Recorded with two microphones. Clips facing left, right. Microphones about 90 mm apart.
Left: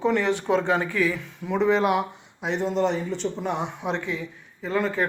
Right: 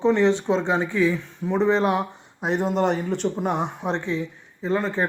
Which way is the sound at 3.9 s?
30° right (ahead or behind).